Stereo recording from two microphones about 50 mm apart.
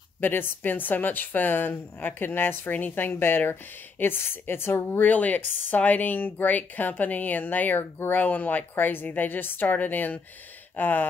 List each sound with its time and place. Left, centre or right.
0.2 s speech: left
5.0 s speech: left